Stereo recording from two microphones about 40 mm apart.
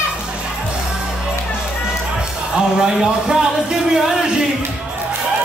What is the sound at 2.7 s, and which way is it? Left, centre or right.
A man's voice, centre.